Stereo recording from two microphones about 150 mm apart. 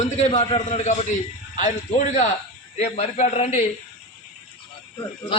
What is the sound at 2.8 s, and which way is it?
Speech, 50° left (ahead or behind).